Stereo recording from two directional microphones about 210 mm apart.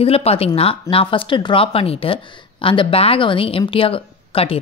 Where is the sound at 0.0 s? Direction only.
30° left (ahead or behind).